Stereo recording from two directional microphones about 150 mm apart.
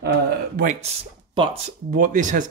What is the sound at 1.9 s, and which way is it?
Speech, 60° right (ahead or behind).